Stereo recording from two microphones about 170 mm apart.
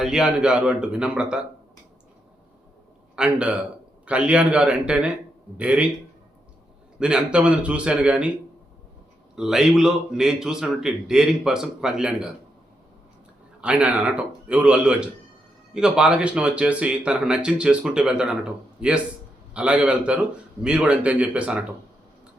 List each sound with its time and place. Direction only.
0.0 s a man's voice: 5° right (ahead or behind)
3.2 s a man's voice: 5° right (ahead or behind)
7.0 s a man's voice: 5° right (ahead or behind)
9.3 s a man's voice: centre (ahead or behind)
13.6 s a man's voice: 5° right (ahead or behind)